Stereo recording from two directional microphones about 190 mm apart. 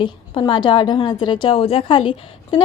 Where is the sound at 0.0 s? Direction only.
25° left (ahead or behind).